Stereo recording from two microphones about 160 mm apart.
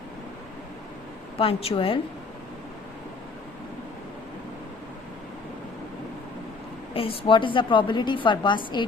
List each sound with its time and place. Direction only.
1.4 s a woman's voice: 35° left (ahead or behind)
6.9 s a woman's voice: 35° left (ahead or behind)